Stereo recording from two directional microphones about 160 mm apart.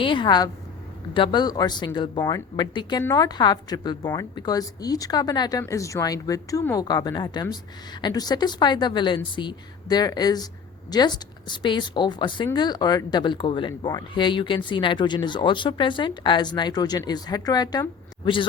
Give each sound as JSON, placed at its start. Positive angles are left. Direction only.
{"t": 0.0, "sound": "speech", "side_deg": 30}